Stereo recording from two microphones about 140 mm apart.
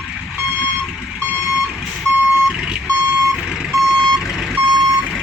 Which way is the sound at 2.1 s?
10° right (ahead or behind).